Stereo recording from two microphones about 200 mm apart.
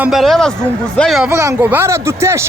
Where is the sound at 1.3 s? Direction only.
15° right (ahead or behind).